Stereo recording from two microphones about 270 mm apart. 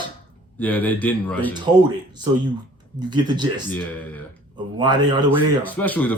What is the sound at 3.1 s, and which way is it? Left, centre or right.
Speech, centre.